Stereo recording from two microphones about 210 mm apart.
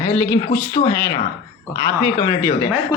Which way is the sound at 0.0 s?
20° left (ahead or behind).